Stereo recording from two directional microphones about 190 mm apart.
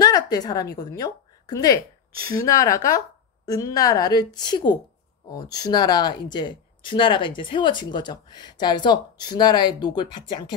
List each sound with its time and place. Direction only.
0.0 s a woman's voice: 20° left (ahead or behind)